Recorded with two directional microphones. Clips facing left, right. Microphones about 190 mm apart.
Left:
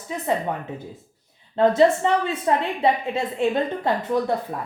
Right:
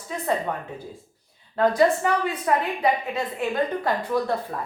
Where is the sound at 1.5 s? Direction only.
25° left (ahead or behind).